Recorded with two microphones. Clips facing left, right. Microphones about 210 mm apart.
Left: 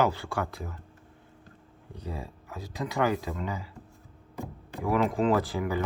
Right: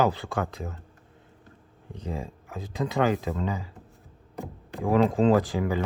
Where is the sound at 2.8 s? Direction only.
20° right (ahead or behind).